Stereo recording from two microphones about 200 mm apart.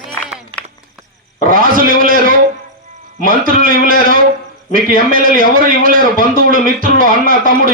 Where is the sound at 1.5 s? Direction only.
45° right (ahead or behind).